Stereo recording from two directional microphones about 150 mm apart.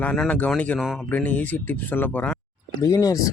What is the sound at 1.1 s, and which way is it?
A man's voice, 10° left (ahead or behind).